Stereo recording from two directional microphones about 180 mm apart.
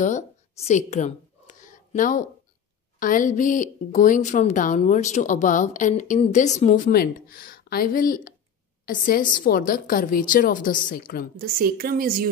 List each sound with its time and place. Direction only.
0.0 s a sound: 40° left (ahead or behind)
3.0 s a woman's voice: 50° left (ahead or behind)
11.3 s speech: 55° right (ahead or behind)